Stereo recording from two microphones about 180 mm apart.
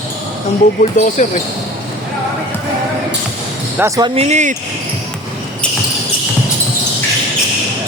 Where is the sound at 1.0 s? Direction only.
45° left (ahead or behind).